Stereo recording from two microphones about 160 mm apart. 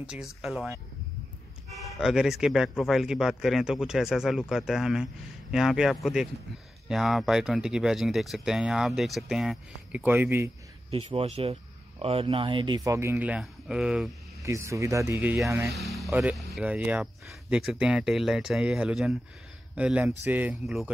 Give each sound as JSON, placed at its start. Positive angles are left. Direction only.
{"t": 0.0, "sound": "speech", "side_deg": -5}
{"t": 1.8, "sound": "speech", "side_deg": -5}
{"t": 10.9, "sound": "a man's voice", "side_deg": -35}
{"t": 14.4, "sound": "speech", "side_deg": -20}
{"t": 15.7, "sound": "speech", "side_deg": 0}
{"t": 16.1, "sound": "speech", "side_deg": -10}